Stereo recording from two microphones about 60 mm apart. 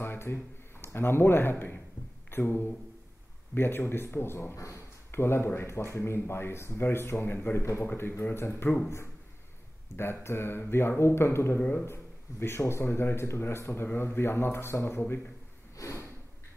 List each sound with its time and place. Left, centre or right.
0.0 s speech: left
3.5 s speech: left
15.7 s a sound: left